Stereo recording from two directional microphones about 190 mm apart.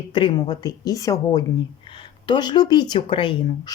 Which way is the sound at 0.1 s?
25° left (ahead or behind).